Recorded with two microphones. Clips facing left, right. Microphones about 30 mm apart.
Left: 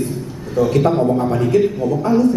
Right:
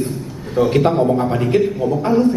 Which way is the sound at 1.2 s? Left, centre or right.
Centre.